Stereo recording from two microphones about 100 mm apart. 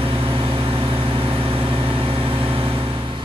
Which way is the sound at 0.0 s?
65° right (ahead or behind).